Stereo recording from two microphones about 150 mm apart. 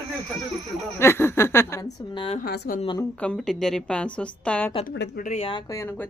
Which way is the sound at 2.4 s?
85° left.